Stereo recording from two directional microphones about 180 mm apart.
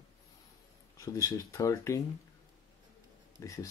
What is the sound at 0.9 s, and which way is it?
Speech, 20° left (ahead or behind).